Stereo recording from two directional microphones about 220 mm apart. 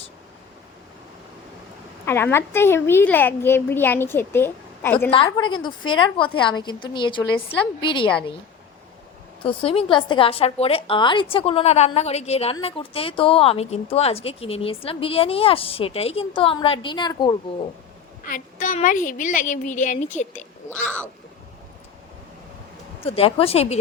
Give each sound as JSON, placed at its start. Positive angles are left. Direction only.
{"t": 2.0, "sound": "a woman's voice", "side_deg": 10}
{"t": 5.1, "sound": "speech", "side_deg": 20}
{"t": 9.4, "sound": "speech", "side_deg": 25}
{"t": 18.3, "sound": "a woman's voice", "side_deg": 35}
{"t": 23.0, "sound": "speech", "side_deg": 25}